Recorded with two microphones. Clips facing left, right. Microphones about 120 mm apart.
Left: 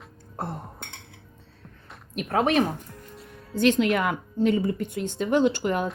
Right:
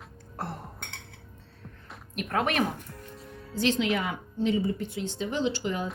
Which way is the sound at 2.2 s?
35° left (ahead or behind).